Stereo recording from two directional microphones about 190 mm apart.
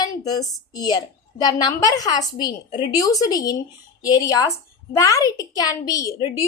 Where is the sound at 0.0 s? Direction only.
20° left (ahead or behind).